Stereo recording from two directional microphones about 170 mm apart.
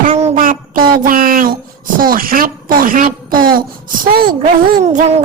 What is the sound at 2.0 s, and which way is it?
A woman's voice, 55° right (ahead or behind).